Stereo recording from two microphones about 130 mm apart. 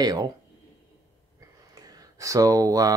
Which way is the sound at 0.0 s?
30° right (ahead or behind).